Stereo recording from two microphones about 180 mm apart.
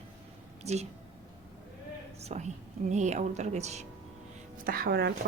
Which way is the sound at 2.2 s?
40° right (ahead or behind).